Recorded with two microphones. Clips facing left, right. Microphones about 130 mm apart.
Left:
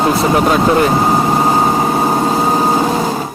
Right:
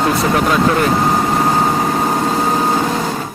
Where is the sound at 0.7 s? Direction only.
15° left (ahead or behind).